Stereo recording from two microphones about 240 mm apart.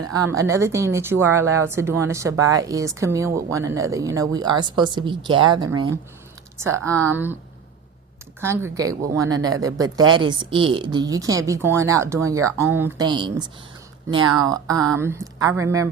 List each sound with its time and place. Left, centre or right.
0.1 s a woman's voice: centre
8.4 s a woman's voice: centre